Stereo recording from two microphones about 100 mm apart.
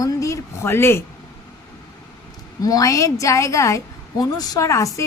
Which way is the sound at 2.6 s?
35° left (ahead or behind).